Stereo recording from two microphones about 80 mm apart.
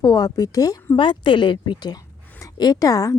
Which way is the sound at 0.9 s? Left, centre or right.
Left.